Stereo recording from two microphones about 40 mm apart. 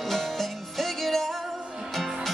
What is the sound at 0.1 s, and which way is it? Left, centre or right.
Music, centre.